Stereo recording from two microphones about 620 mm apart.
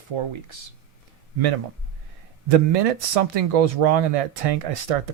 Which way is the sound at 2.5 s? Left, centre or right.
Right.